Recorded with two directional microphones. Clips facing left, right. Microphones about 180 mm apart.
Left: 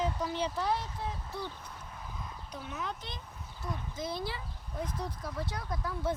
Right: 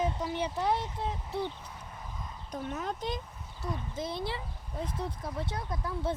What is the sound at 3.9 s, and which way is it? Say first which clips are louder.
Speech: right 1 dB; 25° right (ahead or behind).